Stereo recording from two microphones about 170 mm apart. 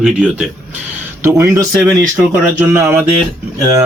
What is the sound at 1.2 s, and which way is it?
A man's voice, 20° right (ahead or behind).